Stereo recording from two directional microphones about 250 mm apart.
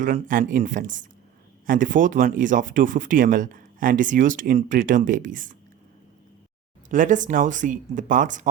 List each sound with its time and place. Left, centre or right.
0.0 s speech: right
6.8 s speech: right